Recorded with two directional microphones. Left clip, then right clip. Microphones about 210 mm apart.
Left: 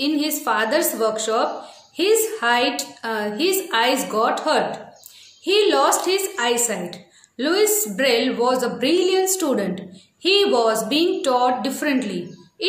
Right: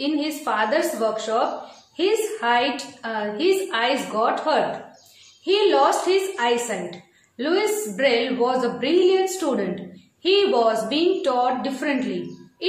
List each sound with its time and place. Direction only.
0.0 s a woman's voice: 55° left (ahead or behind)